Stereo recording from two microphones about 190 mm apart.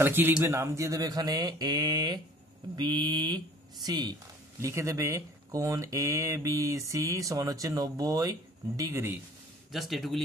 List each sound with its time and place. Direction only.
0.0 s speech: 10° right (ahead or behind)
9.7 s speech: centre (ahead or behind)